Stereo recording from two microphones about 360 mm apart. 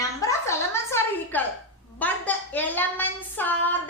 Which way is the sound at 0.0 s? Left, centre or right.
Centre.